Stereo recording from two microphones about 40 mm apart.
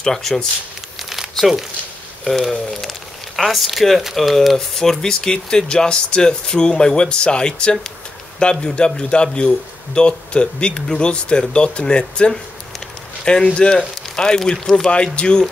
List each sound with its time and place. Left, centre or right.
0.0 s speech: centre
2.2 s speech: centre
4.6 s a man's voice: centre